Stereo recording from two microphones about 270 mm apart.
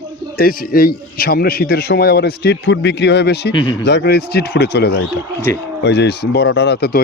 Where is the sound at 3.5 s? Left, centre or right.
Centre.